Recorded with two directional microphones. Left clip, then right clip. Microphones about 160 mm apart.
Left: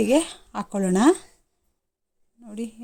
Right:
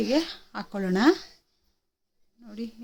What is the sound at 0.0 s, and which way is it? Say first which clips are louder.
Speech: left 5 dB; 35° left (ahead or behind).